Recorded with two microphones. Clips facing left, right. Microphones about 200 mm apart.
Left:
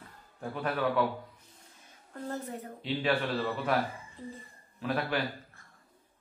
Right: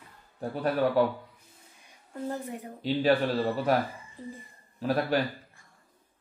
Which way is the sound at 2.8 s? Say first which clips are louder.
Right 6 dB; 40° right (ahead or behind).